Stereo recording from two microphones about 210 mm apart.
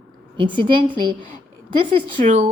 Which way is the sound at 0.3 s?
25° right (ahead or behind).